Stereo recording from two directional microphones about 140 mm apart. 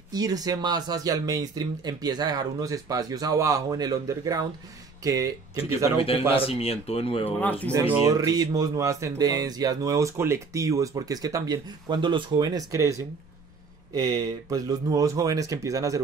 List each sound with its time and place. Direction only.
0.1 s speech: 25° right (ahead or behind)
5.9 s speech: 40° left (ahead or behind)
7.2 s speech: 15° left (ahead or behind)
7.7 s speech: 15° right (ahead or behind)
8.0 s speech: 25° right (ahead or behind)